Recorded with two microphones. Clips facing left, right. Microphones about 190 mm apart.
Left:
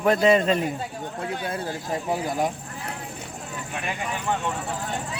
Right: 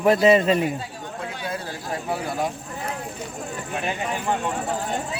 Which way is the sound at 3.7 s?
30° right (ahead or behind).